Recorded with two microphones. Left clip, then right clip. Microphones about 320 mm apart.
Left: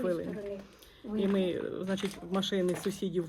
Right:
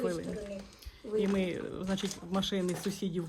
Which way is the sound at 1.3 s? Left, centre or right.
Centre.